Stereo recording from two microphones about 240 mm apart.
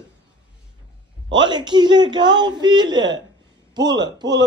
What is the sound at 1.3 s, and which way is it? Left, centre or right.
A man's voice, centre.